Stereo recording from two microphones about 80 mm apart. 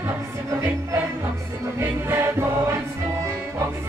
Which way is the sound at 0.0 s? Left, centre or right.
Right.